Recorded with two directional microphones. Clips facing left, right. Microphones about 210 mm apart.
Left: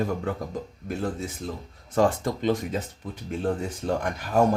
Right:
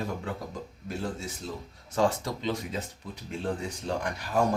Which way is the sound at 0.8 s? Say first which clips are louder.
Left 4 dB; 55° left (ahead or behind).